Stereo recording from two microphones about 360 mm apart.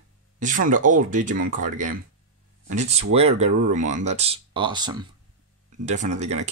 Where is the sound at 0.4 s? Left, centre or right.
Right.